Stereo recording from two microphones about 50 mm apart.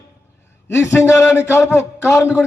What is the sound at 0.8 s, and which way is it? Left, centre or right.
A man's voice, left.